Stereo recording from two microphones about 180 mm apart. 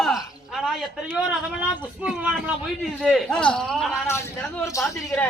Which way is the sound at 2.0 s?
5° right (ahead or behind).